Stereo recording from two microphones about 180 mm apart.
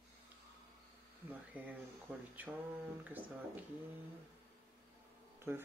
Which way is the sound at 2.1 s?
10° right (ahead or behind).